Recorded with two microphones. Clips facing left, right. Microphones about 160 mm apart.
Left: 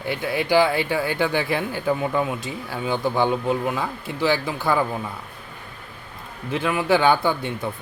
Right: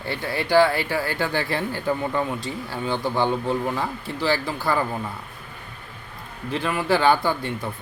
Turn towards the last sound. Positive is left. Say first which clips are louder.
# left 1 dB
turn(degrees=15)  # may be behind; listen again after turning